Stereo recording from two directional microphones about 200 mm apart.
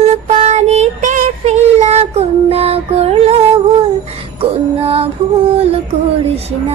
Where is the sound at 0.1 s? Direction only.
35° right (ahead or behind).